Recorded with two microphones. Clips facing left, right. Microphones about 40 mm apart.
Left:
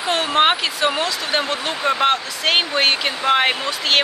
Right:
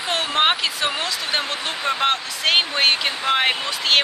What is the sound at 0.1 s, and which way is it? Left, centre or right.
Speech, centre.